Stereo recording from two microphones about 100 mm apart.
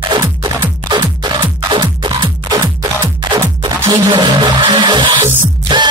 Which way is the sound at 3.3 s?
45° right (ahead or behind).